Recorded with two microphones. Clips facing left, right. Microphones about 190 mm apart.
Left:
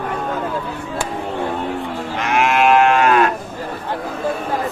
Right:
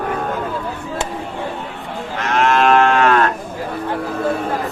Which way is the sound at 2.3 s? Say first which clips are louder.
Even; 10° left (ahead or behind).